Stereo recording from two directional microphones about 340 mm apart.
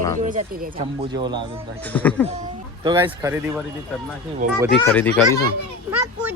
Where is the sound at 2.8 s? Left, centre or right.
Centre.